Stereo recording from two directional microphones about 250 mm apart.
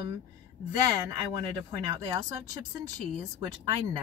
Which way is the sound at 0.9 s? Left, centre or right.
Centre.